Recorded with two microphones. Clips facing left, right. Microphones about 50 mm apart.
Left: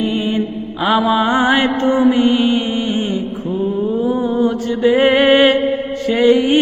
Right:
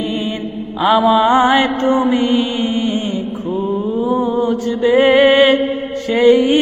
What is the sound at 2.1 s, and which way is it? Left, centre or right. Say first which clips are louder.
Music: left 2 dB; left.